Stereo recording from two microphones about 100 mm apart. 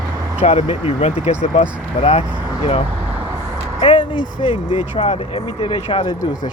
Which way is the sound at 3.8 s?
60° left (ahead or behind).